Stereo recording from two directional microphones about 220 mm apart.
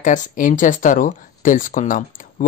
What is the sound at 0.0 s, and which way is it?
Speech, 35° left (ahead or behind).